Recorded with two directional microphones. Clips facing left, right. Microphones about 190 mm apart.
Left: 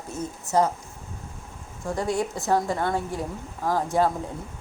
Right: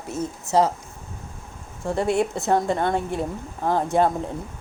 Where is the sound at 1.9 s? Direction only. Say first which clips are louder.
Right 4 dB; 25° right (ahead or behind).